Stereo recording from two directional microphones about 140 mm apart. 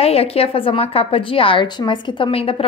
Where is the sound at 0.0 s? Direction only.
45° left (ahead or behind).